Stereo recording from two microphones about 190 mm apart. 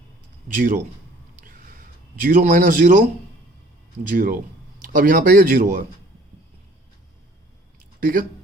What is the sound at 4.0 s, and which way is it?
A man's voice, 45° right (ahead or behind).